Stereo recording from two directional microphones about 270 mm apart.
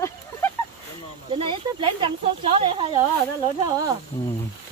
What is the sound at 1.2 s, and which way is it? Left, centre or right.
Speech, centre.